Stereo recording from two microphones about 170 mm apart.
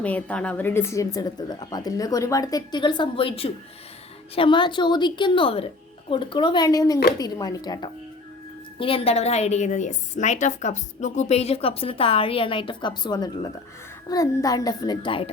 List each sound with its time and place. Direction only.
0.0 s speech: 10° left (ahead or behind); by 7.9 s 25° left (ahead or behind)
8.8 s a woman's voice: 35° left (ahead or behind)